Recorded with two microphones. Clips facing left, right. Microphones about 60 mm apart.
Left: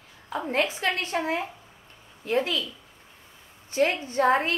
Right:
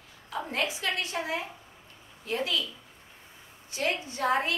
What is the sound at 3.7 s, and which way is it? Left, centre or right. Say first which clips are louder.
Speech: left 6 dB; left.